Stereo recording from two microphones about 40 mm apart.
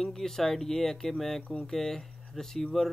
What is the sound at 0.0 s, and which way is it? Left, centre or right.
Speech, centre.